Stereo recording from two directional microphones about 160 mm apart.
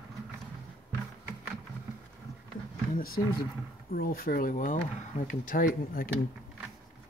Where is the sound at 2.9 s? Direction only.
65° left (ahead or behind).